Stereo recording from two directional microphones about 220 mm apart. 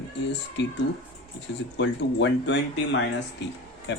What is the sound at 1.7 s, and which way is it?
Speech, 55° left (ahead or behind).